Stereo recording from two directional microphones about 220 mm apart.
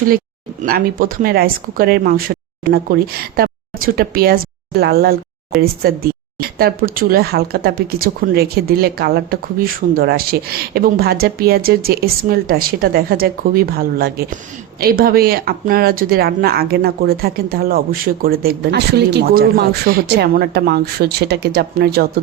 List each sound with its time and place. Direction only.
0.6 s speech: 40° right (ahead or behind)